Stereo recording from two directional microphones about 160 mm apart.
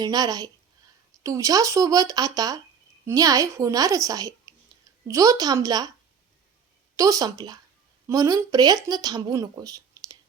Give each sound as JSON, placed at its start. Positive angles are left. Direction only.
{"t": 0.0, "sound": "speech", "side_deg": -25}
{"t": 6.9, "sound": "speech", "side_deg": -20}